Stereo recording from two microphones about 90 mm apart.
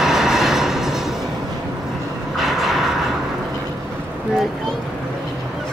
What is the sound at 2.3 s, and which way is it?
Vehicle, centre (ahead or behind).